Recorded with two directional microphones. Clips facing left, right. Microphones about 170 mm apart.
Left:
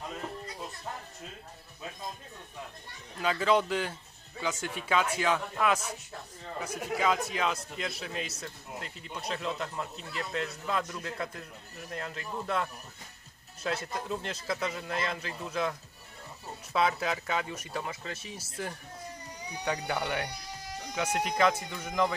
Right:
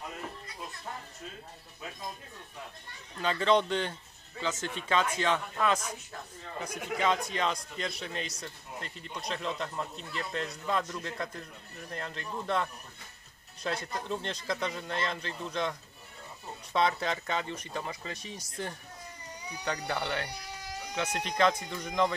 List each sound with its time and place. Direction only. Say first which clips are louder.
3.2 s a man's voice: even; 5° left (ahead or behind)
16.7 s a man's voice: even; 5° left (ahead or behind)